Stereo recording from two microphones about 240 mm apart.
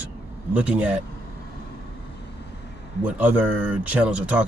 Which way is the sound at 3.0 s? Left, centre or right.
Centre.